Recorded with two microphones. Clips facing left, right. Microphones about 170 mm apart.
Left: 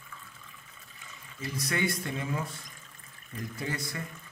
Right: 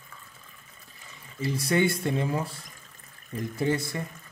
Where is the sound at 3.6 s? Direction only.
30° right (ahead or behind).